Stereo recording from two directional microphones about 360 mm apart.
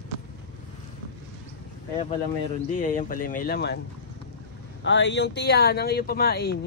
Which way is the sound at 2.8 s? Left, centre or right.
Left.